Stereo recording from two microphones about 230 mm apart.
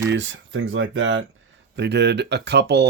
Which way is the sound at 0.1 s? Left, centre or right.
Right.